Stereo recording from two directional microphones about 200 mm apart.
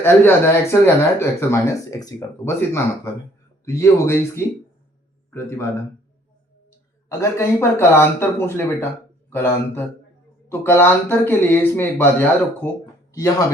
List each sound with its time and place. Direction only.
0.0 s speech: 10° left (ahead or behind)
7.1 s speech: 15° left (ahead or behind)
12.8 s a sound: 15° left (ahead or behind)